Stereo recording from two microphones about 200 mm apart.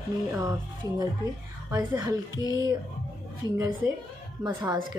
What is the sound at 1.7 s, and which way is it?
Speech, 20° right (ahead or behind).